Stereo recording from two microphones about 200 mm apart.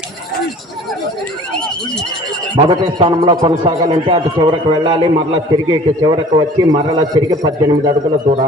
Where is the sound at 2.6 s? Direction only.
25° right (ahead or behind).